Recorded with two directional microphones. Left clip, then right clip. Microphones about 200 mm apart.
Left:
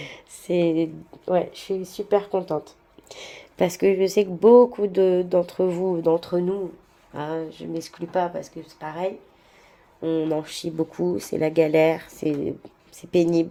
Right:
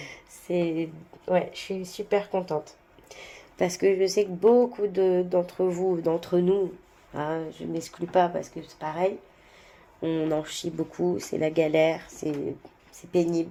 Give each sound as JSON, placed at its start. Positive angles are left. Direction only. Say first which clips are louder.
{"t": 0.0, "sound": "speech", "louder": "left 4 dB", "side_deg": 45}
{"t": 6.0, "sound": "speech", "louder": "left 4 dB", "side_deg": 30}
{"t": 6.4, "sound": "speech", "louder": "right 2 dB", "side_deg": 15}
{"t": 13.0, "sound": "speech", "louder": "left 5 dB", "side_deg": 50}